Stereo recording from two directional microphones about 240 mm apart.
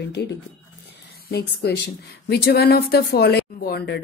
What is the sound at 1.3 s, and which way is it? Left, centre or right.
Speech, left.